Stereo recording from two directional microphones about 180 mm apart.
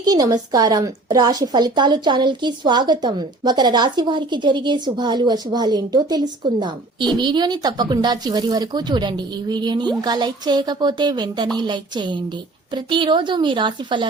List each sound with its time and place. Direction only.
0.0 s a woman's voice: 20° right (ahead or behind)